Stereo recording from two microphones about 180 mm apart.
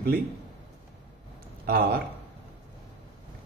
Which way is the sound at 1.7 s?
60° right (ahead or behind).